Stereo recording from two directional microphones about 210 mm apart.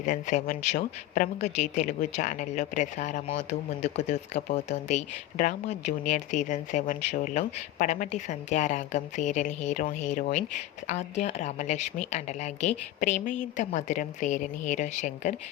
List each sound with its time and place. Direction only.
0.0 s speech: 35° left (ahead or behind)